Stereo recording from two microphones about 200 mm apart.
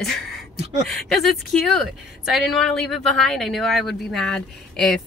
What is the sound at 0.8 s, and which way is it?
Speech, centre (ahead or behind).